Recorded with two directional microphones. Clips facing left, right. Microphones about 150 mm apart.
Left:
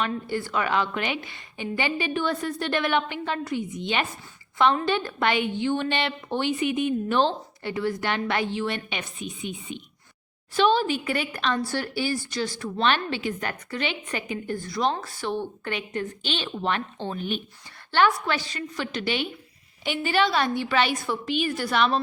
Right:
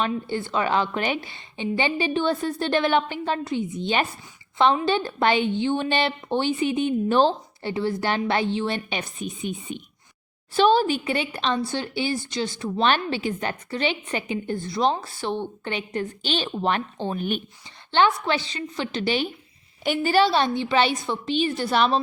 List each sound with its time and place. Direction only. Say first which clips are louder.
0.3 s a woman's voice: right 2 dB; 25° right (ahead or behind)
12.8 s a woman's voice: right 2 dB; 35° right (ahead or behind)
17.1 s speech: right 3 dB; 50° right (ahead or behind)
17.9 s a woman's voice: right 2 dB; 25° right (ahead or behind)